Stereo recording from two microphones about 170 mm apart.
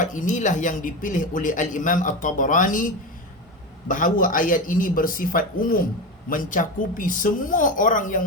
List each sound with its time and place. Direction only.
0.0 s a man's voice: 50° left (ahead or behind)